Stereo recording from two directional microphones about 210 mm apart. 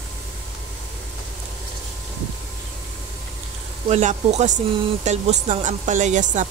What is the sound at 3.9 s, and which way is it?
Speech, 35° right (ahead or behind).